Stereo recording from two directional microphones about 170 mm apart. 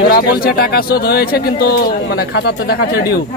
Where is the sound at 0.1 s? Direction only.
60° left (ahead or behind).